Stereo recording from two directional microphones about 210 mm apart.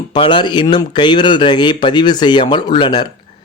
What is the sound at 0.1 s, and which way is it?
A man's voice, 25° left (ahead or behind).